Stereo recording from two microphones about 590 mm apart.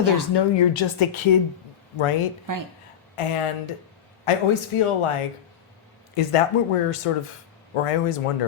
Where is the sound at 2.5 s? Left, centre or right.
Right.